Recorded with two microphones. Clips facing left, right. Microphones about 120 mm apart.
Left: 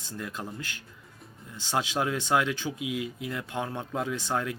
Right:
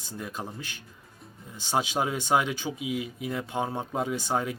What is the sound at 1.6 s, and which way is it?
Speech, 15° right (ahead or behind).